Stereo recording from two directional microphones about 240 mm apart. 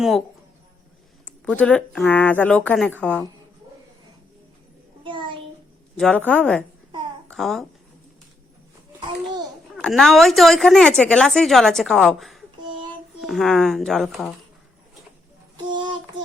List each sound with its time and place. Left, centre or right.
1.2 s a woman's voice: centre
5.0 s a sound: centre
6.0 s a woman's voice: centre
9.0 s babbling: centre
9.7 s a woman's voice: centre
12.6 s child singing: centre
13.2 s a woman's voice: centre
15.7 s child singing: centre